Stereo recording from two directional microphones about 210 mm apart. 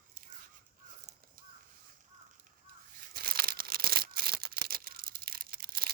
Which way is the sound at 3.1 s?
45° right (ahead or behind).